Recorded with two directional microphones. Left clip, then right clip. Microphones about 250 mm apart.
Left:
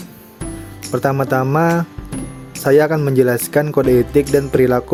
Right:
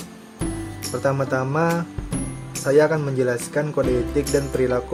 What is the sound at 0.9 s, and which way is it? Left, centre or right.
Speech, left.